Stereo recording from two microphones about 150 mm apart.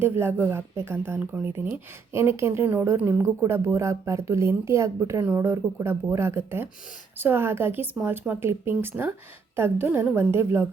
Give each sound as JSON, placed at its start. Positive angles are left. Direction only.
{"t": 0.0, "sound": "speech", "side_deg": -15}